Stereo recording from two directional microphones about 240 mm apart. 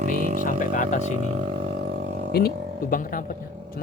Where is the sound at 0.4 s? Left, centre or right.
Left.